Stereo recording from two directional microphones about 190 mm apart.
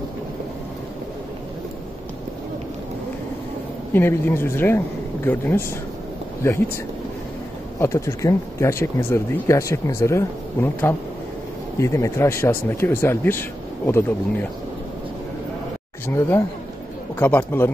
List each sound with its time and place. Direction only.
3.9 s speech: 10° left (ahead or behind)
7.8 s speech: 15° left (ahead or behind)
16.1 s speech: 10° left (ahead or behind)